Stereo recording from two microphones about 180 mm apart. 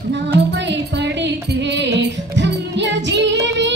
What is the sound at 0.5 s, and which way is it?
Music, 75° right (ahead or behind).